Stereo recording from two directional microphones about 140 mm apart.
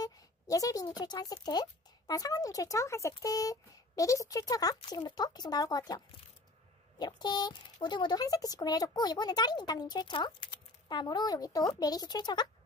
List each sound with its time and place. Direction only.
0.0 s speech: 25° left (ahead or behind)